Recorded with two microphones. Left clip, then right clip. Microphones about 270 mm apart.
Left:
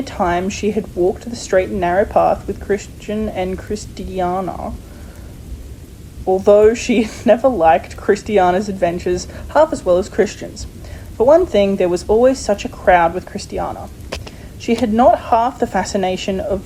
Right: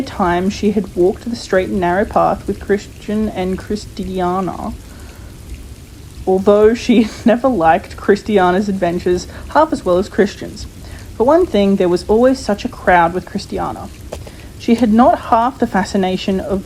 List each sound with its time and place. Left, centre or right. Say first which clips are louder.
0.0 s speech: right 1 dB; centre
6.4 s speech: left 1 dB; centre
14.1 s a sound: left 2 dB; centre
14.6 s speech: right 1 dB; centre